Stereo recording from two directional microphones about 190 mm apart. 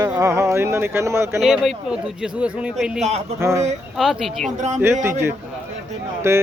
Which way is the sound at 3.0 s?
35° right (ahead or behind).